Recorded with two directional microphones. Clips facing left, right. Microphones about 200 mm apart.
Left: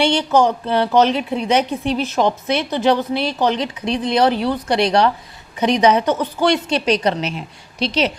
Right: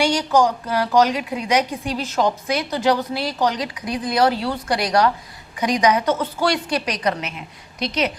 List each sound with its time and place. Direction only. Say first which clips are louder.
0.0 s a woman's voice: left 2 dB; 25° left (ahead or behind)